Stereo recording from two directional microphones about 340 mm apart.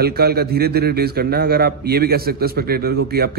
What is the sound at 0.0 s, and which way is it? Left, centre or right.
A man's voice, right.